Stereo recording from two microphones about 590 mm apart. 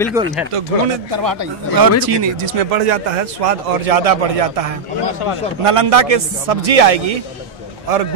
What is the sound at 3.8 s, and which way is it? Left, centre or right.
Speech, right.